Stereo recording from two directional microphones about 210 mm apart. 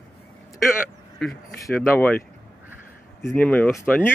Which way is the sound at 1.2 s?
Centre (ahead or behind).